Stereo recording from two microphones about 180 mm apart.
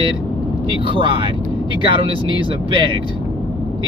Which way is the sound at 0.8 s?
30° right (ahead or behind).